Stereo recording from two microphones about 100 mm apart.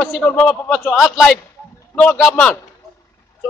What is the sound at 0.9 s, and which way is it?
Speech, centre (ahead or behind).